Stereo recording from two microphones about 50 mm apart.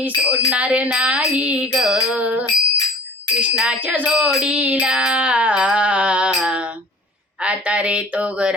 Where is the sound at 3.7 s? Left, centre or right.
Right.